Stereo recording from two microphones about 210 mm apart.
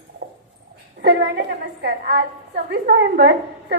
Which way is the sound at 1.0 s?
50° right (ahead or behind).